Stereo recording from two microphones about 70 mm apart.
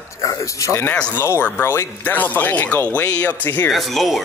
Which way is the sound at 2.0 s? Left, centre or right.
Left.